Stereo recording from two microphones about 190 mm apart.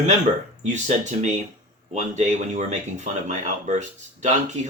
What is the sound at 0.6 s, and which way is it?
Speech, 40° right (ahead or behind).